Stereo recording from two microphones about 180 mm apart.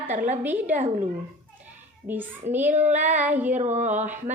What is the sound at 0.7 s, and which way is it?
Speech, 45° right (ahead or behind).